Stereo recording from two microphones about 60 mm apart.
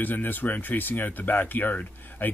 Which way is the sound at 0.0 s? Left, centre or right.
Left.